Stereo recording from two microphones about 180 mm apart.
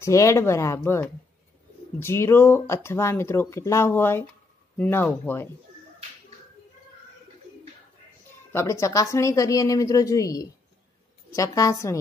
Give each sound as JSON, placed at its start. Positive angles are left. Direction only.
{"t": 0.0, "sound": "speech", "side_deg": 15}
{"t": 8.5, "sound": "a woman's voice", "side_deg": 15}